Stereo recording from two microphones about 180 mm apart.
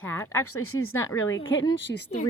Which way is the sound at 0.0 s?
15° left (ahead or behind).